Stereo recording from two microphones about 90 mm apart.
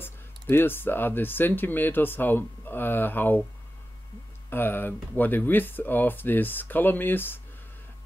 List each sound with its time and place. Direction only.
0.0 s speech: 25° left (ahead or behind)
4.5 s speech: 25° left (ahead or behind)